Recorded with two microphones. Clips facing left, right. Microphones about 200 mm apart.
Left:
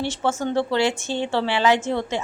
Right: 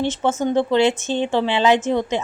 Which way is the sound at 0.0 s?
20° right (ahead or behind).